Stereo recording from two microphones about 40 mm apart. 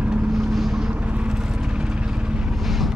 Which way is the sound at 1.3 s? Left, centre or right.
Centre.